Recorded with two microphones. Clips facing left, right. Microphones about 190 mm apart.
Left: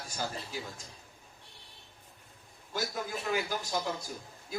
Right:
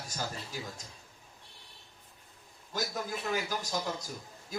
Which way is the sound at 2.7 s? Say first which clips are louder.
Even; 40° right (ahead or behind).